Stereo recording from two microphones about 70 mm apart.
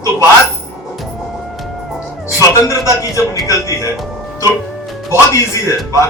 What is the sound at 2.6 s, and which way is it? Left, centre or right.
A man's voice, left.